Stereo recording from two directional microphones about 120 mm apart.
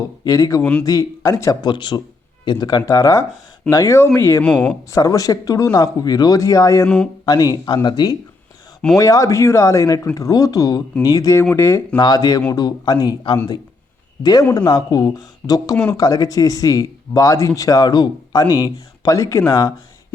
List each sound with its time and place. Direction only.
0.3 s speech: 30° left (ahead or behind)
0.6 s speech: 10° left (ahead or behind)
0.9 s speech: 30° left (ahead or behind)
4.4 s speech: 5° left (ahead or behind)
4.9 s speech: 30° left (ahead or behind)
6.8 s speech: 10° left (ahead or behind)
7.3 s speech: 35° left (ahead or behind)
11.9 s a man's voice: 35° left (ahead or behind)
18.4 s speech: 20° right (ahead or behind)
19.0 s speech: 25° left (ahead or behind)